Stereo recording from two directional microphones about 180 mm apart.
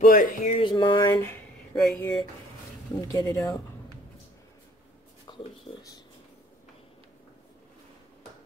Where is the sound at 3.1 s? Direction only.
20° left (ahead or behind).